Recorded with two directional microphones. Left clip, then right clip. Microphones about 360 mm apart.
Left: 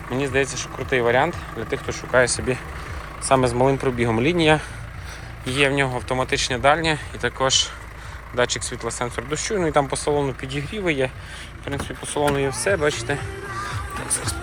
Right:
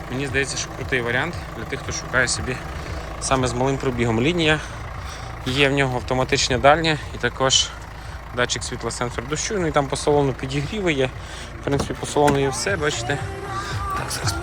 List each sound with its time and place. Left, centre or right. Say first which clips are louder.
0.1 s speech: left 2 dB; centre
12.6 s speech: left 2 dB; centre